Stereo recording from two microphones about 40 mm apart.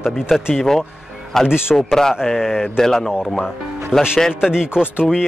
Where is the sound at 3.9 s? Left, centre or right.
Centre.